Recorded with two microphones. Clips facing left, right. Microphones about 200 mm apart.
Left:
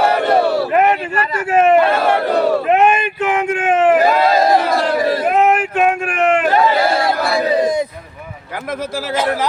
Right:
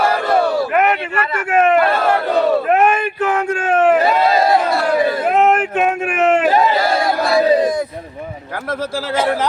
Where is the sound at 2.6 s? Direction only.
20° left (ahead or behind).